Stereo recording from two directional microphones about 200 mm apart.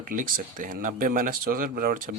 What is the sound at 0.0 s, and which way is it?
A man's voice, 45° right (ahead or behind).